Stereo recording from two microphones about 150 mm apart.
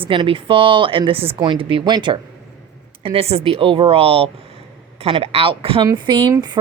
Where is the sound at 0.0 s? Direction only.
35° right (ahead or behind).